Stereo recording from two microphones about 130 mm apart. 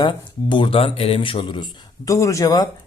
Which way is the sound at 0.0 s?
35° left (ahead or behind).